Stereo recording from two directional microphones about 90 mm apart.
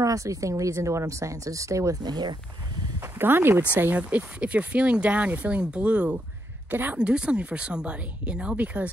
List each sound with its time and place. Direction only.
0.0 s speech: 40° right (ahead or behind)
2.0 s speech: 50° right (ahead or behind)
3.0 s speech: 25° right (ahead or behind)